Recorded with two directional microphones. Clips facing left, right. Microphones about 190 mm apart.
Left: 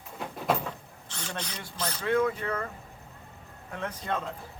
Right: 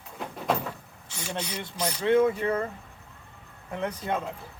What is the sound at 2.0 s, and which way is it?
Speech, 25° right (ahead or behind).